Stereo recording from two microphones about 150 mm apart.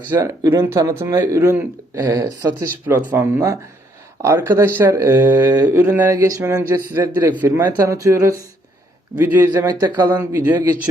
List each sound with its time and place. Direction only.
0.2 s speech: 20° right (ahead or behind)
2.8 s speech: 15° right (ahead or behind)
6.1 s speech: 25° right (ahead or behind)